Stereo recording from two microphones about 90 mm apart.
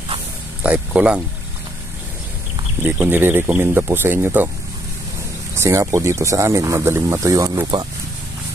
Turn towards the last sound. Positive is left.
turn(degrees=-35)  # may be behind; listen again after turning